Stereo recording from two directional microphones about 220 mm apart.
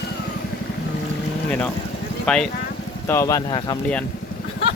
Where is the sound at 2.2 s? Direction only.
5° left (ahead or behind).